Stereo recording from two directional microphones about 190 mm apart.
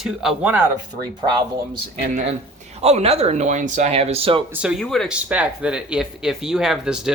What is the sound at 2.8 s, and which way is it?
Speech, 35° right (ahead or behind).